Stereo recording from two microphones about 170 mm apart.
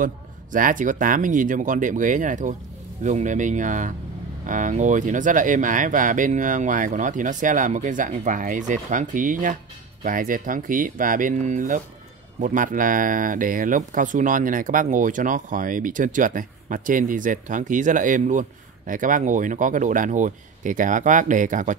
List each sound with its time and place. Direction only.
0.0 s speech: 55° right (ahead or behind)